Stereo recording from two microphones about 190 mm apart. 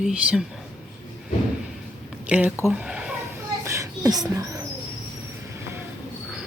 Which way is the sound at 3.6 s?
15° right (ahead or behind).